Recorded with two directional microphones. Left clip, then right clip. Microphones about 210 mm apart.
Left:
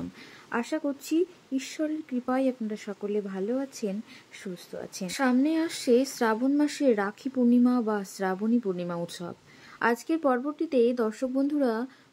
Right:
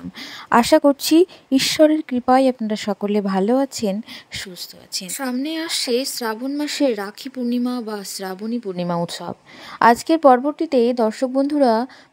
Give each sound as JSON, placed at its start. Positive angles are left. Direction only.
{"t": 0.5, "sound": "a woman's voice", "side_deg": -50}